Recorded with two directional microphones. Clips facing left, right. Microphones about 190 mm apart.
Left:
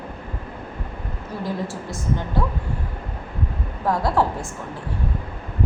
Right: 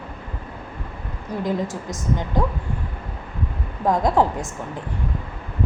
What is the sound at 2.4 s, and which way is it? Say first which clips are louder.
Speech: right 3 dB; 15° right (ahead or behind).